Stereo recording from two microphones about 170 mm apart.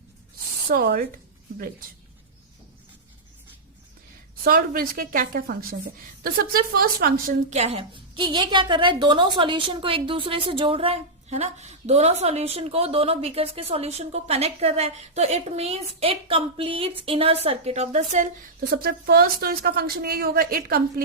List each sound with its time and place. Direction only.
0.7 s a woman's voice: 60° right (ahead or behind)
4.4 s a woman's voice: 60° right (ahead or behind)
7.5 s a woman's voice: 40° right (ahead or behind)
18.7 s a woman's voice: 65° right (ahead or behind)